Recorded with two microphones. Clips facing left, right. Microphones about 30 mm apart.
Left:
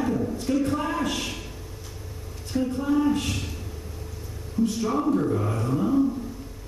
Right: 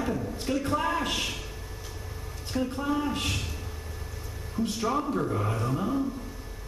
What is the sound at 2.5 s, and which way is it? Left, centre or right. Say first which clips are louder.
Speech: left 5 dB; centre.